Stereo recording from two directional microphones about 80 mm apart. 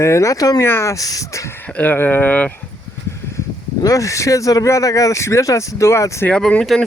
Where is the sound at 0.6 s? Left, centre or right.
Left.